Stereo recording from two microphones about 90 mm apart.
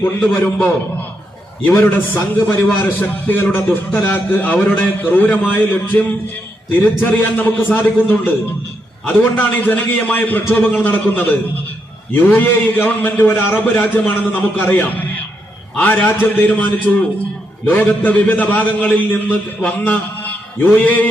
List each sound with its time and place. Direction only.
0.0 s a man's voice: 25° left (ahead or behind)
9.3 s a man's voice: 20° left (ahead or behind)